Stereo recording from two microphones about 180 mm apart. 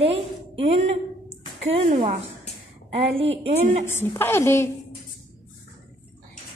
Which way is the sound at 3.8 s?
15° left (ahead or behind).